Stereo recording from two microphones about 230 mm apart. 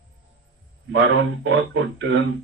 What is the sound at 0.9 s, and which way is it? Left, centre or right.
Speech, right.